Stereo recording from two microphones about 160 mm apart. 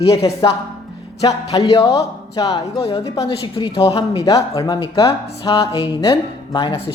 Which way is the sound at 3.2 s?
35° left (ahead or behind).